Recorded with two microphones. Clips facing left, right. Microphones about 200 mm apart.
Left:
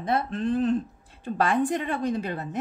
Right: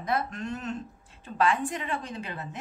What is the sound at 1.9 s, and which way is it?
Speech, 60° left (ahead or behind).